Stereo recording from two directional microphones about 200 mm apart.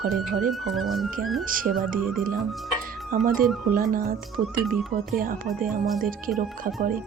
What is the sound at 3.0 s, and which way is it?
A woman's voice, 45° right (ahead or behind).